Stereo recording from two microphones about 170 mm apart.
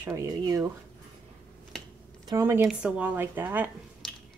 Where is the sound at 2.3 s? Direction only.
15° right (ahead or behind).